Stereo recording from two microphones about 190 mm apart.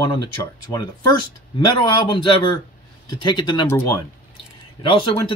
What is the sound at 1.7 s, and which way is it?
Speech, 25° left (ahead or behind).